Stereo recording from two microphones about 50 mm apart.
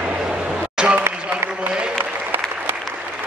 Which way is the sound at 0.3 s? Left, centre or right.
Right.